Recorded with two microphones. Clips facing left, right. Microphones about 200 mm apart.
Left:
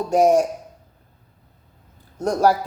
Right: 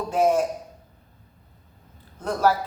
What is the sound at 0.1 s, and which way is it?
Speech, 45° left (ahead or behind).